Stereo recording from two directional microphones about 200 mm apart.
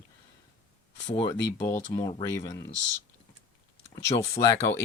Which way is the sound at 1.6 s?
20° left (ahead or behind).